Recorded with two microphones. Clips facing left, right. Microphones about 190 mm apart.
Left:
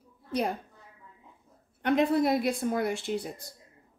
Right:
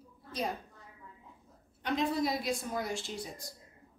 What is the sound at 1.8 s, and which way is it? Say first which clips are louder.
A woman's voice: left 7 dB; 60° left (ahead or behind).